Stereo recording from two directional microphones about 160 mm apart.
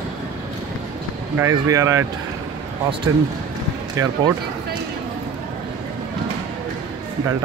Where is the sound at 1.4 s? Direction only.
20° right (ahead or behind).